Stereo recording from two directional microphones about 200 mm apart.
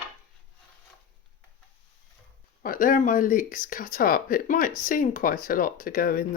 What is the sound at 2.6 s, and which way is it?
Speech, 45° left (ahead or behind).